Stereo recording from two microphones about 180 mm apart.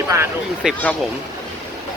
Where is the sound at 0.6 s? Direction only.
5° right (ahead or behind).